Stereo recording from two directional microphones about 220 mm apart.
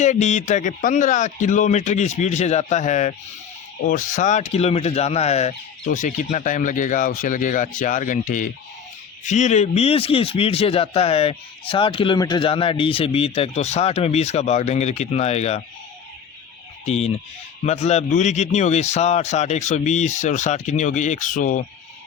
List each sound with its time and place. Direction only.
0.0 s speech: 30° left (ahead or behind)
16.8 s speech: 30° left (ahead or behind)